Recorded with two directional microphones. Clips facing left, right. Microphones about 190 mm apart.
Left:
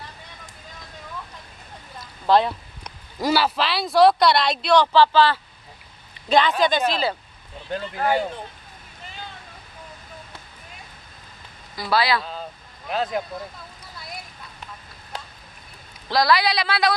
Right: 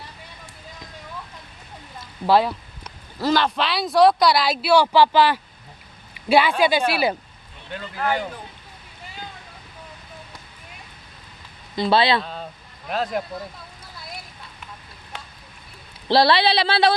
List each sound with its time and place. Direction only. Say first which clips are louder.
2.2 s speech: even; 5° right (ahead or behind)
2.8 s a man's voice: even; 10° left (ahead or behind); by 7.2 s 15° right (ahead or behind)
7.9 s speech: left 2 dB; 30° left (ahead or behind)
11.7 s speech: right 3 dB; 25° right (ahead or behind)
12.2 s speech: right 2 dB; centre (ahead or behind)
15.1 s a sound: left 3 dB; 35° left (ahead or behind)
16.1 s speech: right 3 dB; 30° right (ahead or behind)